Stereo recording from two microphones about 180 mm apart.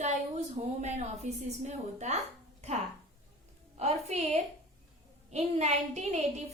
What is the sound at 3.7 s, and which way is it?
A woman's voice, 40° right (ahead or behind).